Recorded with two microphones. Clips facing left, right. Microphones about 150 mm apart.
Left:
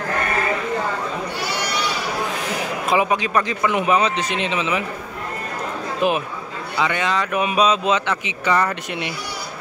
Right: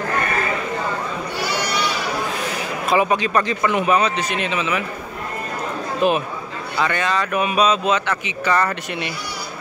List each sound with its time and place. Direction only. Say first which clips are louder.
2.9 s speech: right 1 dB; 10° left (ahead or behind)
6.0 s speech: right 2 dB; 15° left (ahead or behind)